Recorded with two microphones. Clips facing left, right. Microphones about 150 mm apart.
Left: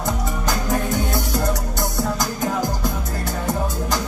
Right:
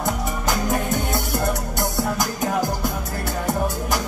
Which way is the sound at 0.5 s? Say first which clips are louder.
Even; 20° right (ahead or behind).